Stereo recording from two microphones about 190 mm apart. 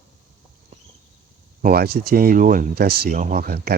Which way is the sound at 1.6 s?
55° right (ahead or behind).